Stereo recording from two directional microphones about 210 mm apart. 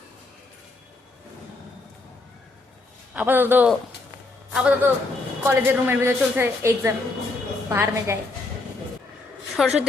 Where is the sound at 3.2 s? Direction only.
10° right (ahead or behind).